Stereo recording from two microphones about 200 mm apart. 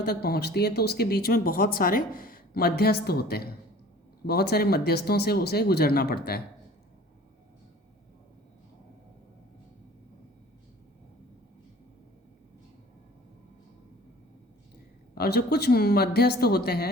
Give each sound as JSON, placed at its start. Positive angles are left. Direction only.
{"t": 0.0, "sound": "speech", "side_deg": 50}
{"t": 15.1, "sound": "speech", "side_deg": 50}